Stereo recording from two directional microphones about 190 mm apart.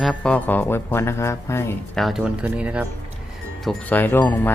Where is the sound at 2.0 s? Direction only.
5° right (ahead or behind).